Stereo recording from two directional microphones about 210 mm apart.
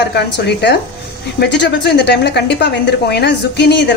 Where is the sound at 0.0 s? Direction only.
55° left (ahead or behind).